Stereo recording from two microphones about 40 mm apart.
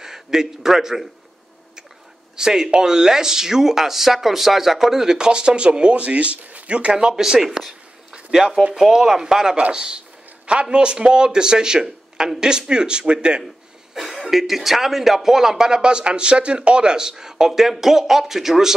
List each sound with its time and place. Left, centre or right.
0.0 s a man's voice: centre
2.3 s speech: centre; by 6.6 s right
6.7 s a man's voice: right
7.2 s speech: centre
8.1 s a sound: centre
8.7 s a man's voice: centre; by 13.4 s right
13.9 s a sound: centre
14.3 s speech: centre